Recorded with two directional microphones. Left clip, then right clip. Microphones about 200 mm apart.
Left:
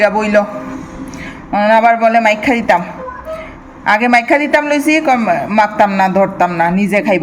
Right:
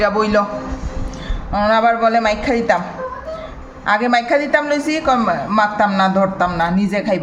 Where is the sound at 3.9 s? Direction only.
20° left (ahead or behind).